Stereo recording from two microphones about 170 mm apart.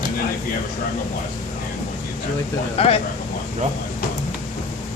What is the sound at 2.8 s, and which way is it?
Speech, 35° left (ahead or behind).